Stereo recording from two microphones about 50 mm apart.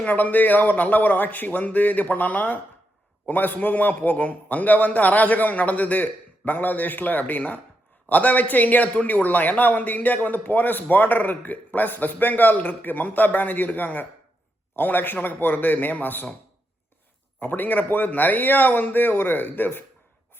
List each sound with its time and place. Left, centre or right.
0.0 s a man's voice: left
17.4 s a man's voice: left